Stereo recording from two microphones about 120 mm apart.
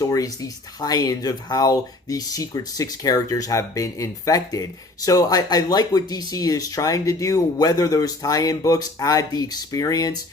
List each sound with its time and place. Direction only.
0.0 s speech: 30° left (ahead or behind)